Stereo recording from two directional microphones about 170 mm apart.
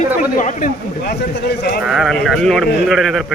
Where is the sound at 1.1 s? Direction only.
75° left (ahead or behind).